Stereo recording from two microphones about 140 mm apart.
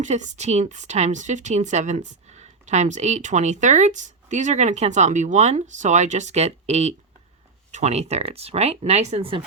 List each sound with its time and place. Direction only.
0.0 s speech: 60° right (ahead or behind)